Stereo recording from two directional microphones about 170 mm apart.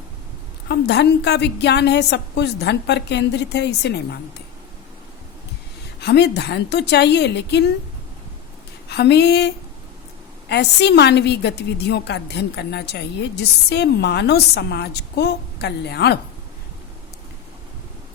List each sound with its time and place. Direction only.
0.7 s a woman's voice: 80° left
6.0 s a woman's voice: 80° left
8.9 s a woman's voice: 80° left
10.5 s a woman's voice: 80° left